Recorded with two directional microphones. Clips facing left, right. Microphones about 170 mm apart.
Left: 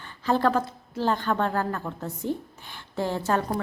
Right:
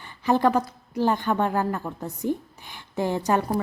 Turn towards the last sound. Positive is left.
turn(degrees=-15)  # may be behind; listen again after turning